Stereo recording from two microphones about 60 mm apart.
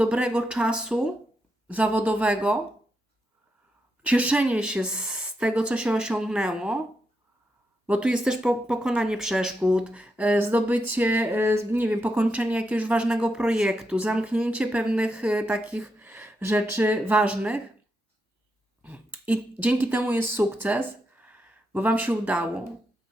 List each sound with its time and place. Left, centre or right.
0.0 s speech: centre
1.7 s speech: right
4.0 s speech: right
7.9 s speech: centre
11.3 s speech: right
11.8 s speech: right
16.9 s speech: right
18.8 s speech: right